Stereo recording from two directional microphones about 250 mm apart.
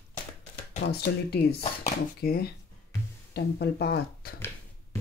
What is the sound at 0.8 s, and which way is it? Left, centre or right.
Speech, left.